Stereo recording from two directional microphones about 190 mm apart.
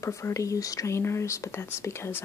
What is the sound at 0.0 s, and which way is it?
Speech, 15° left (ahead or behind).